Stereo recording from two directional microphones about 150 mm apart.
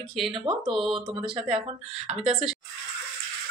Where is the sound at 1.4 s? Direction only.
5° right (ahead or behind).